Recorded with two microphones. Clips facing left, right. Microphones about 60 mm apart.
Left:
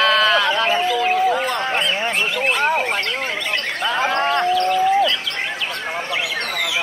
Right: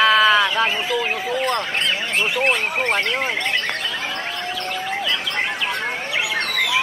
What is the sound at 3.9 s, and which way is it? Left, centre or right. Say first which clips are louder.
Livestock: left 9 dB; left.